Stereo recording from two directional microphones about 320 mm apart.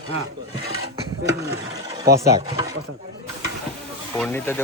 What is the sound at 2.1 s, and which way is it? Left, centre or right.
Speech, centre.